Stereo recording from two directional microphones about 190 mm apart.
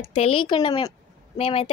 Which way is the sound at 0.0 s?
30° left (ahead or behind).